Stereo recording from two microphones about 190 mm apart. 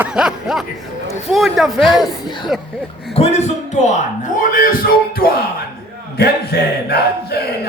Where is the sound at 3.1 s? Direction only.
35° left (ahead or behind); by 7.4 s 55° left (ahead or behind).